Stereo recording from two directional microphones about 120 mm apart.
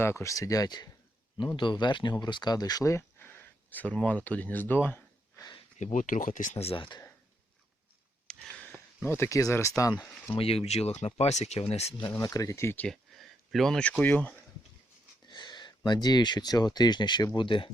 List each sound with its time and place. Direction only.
0.0 s speech: 25° left (ahead or behind)
5.8 s speech: 90° left
6.7 s speech: 40° left (ahead or behind)
8.3 s speech: 5° left (ahead or behind)
10.3 s speech: 55° left (ahead or behind)
12.2 s speech: 30° left (ahead or behind)
12.9 s a sound: centre (ahead or behind)
14.0 s speech: 15° left (ahead or behind)
15.3 s speech: 40° left (ahead or behind)